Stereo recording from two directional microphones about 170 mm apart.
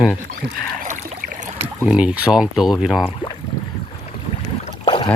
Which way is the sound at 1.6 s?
5° right (ahead or behind).